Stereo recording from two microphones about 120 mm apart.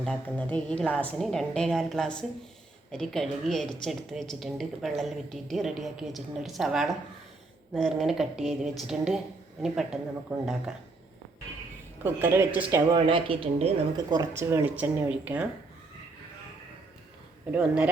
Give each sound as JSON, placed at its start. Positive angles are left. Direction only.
{"t": 0.0, "sound": "a woman's voice", "side_deg": 10}
{"t": 12.0, "sound": "speech", "side_deg": -20}
{"t": 13.1, "sound": "speech", "side_deg": -45}
{"t": 14.1, "sound": "speech", "side_deg": -30}
{"t": 14.4, "sound": "speech", "side_deg": -15}
{"t": 17.5, "sound": "speech", "side_deg": -10}